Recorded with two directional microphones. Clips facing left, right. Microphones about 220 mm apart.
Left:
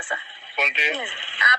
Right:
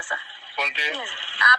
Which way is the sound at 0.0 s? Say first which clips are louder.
Left 3 dB; 20° left (ahead or behind).